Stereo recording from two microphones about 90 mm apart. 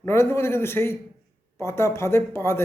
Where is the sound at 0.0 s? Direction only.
25° left (ahead or behind).